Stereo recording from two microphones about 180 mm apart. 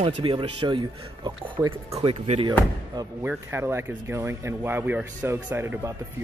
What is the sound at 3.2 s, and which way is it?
Speech, 10° right (ahead or behind).